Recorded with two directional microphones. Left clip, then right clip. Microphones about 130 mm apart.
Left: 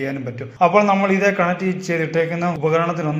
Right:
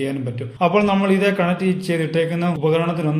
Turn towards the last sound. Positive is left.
turn(degrees=-25)  # may be behind; listen again after turning